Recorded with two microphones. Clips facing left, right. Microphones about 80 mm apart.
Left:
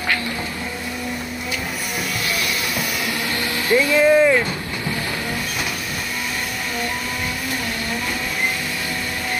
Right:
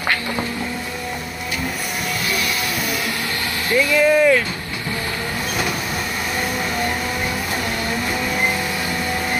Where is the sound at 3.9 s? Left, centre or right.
Centre.